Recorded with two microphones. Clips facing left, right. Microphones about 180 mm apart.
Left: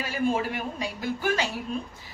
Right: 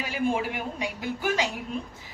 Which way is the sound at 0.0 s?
15° right (ahead or behind).